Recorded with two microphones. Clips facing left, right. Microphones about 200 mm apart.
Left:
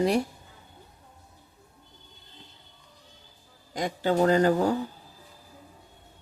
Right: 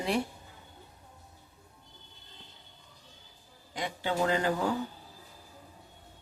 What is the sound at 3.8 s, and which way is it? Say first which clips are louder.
Speech: left 7 dB; 40° left (ahead or behind).